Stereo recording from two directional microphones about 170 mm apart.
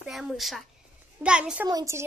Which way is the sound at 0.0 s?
Centre (ahead or behind).